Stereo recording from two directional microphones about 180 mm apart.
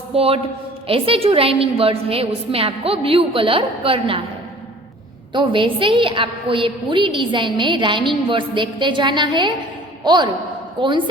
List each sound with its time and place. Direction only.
0.1 s a man's voice: 30° right (ahead or behind)
5.3 s a woman's voice: 25° right (ahead or behind)